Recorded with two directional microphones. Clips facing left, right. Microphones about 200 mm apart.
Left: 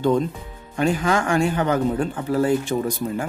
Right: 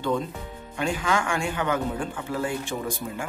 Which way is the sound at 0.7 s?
40° left (ahead or behind).